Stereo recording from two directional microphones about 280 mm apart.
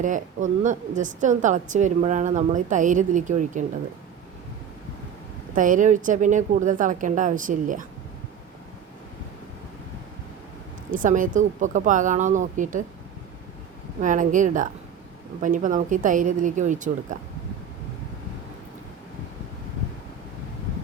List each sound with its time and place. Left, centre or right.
0.0 s a woman's voice: right
5.5 s a woman's voice: right
10.9 s a woman's voice: right
14.0 s a woman's voice: right